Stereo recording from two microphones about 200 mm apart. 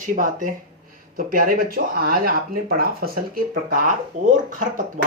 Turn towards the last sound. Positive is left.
turn(degrees=-40)  # may be behind; listen again after turning